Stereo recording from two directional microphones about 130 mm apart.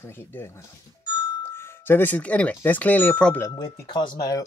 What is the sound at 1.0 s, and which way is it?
Doorbell, 30° left (ahead or behind).